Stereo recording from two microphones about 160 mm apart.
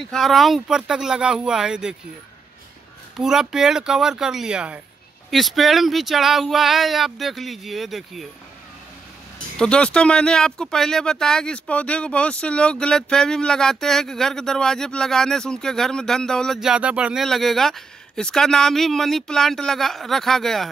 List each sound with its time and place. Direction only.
0.0 s speech: centre (ahead or behind)
3.2 s speech: 5° right (ahead or behind)
9.6 s speech: 5° left (ahead or behind)